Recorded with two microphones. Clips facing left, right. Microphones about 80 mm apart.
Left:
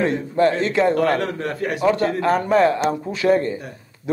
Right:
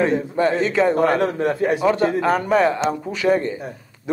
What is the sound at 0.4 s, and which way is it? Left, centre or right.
Speech, centre.